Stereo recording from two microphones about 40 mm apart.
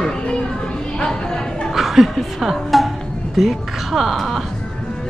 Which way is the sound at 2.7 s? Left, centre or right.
Centre.